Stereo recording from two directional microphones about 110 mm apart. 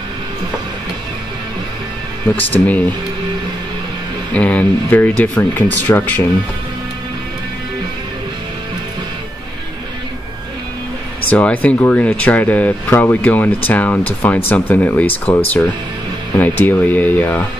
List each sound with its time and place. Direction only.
2.3 s speech: 15° left (ahead or behind)
4.4 s speech: 15° left (ahead or behind)
11.2 s speech: 15° left (ahead or behind)